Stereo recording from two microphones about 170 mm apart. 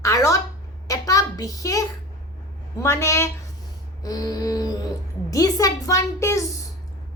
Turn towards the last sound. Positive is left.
turn(degrees=15)  # may be behind; listen again after turning